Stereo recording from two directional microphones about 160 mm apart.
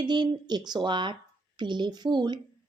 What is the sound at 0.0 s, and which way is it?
Speech, 25° right (ahead or behind).